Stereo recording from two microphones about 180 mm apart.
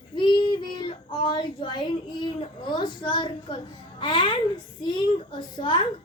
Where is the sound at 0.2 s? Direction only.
25° left (ahead or behind).